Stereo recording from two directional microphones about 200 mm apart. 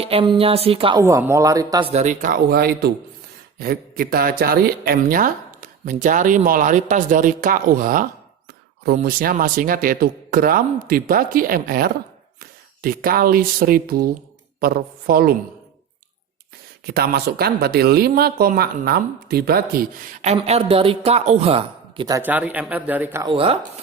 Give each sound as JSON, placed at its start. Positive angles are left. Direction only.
{"t": 0.0, "sound": "speech", "side_deg": -25}
{"t": 1.0, "sound": "a man's voice", "side_deg": -15}
{"t": 1.9, "sound": "speech", "side_deg": -35}
{"t": 16.8, "sound": "speech", "side_deg": -50}
{"t": 20.2, "sound": "speech", "side_deg": -30}
{"t": 22.2, "sound": "a man's voice", "side_deg": -10}
{"t": 23.2, "sound": "speech", "side_deg": -25}